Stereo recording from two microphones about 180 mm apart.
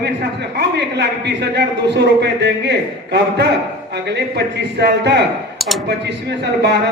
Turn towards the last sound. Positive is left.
turn(degrees=-70)  # may be behind; listen again after turning